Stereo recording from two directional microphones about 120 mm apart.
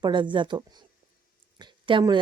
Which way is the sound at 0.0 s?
40° right (ahead or behind).